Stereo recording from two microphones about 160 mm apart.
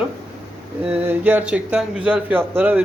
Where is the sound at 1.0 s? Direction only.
10° right (ahead or behind).